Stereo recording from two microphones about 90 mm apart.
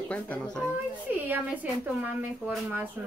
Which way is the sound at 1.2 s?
15° right (ahead or behind).